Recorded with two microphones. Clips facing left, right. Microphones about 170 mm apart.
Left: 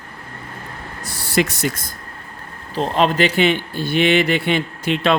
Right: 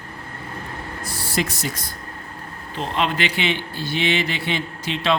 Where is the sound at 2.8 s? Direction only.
40° left (ahead or behind).